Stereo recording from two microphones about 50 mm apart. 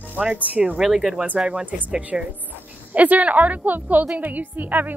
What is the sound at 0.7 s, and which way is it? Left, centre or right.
A woman's voice, centre.